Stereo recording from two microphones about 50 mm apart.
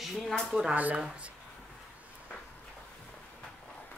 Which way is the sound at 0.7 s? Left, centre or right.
Right.